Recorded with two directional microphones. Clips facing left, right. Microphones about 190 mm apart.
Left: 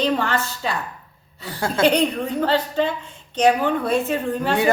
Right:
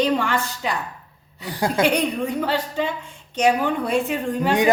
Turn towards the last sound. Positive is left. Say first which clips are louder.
# right 1 dB
turn(degrees=-15)  # may be behind; listen again after turning